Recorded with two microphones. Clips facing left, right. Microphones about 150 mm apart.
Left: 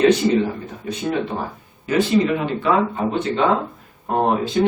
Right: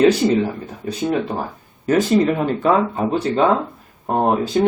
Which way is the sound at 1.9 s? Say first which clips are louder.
Right 2 dB; 45° right (ahead or behind).